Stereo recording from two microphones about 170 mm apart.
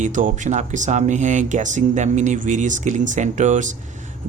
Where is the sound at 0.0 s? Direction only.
45° right (ahead or behind).